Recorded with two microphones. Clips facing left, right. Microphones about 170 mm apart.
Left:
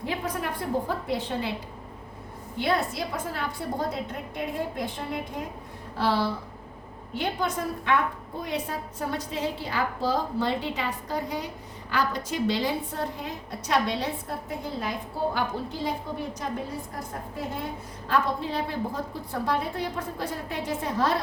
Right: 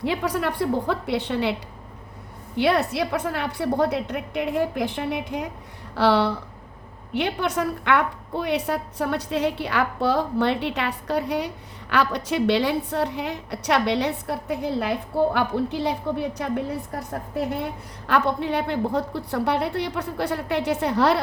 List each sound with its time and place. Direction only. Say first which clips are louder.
0.0 s a woman's voice: right 6 dB; 80° right
2.6 s a woman's voice: right 6 dB; 70° right (ahead or behind)
18.1 s a woman's voice: right 4 dB; 70° right (ahead or behind)